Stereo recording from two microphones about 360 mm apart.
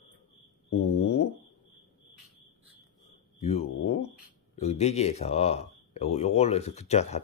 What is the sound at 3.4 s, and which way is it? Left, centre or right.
Speech, centre.